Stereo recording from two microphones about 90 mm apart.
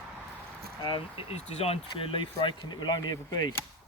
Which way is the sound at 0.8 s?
80° left.